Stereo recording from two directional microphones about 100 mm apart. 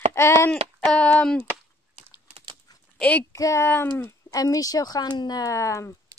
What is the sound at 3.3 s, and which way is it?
Speech, 30° left (ahead or behind).